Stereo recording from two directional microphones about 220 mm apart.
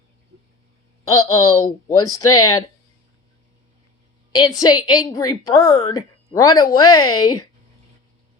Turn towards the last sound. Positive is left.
turn(degrees=15)  # may be behind; listen again after turning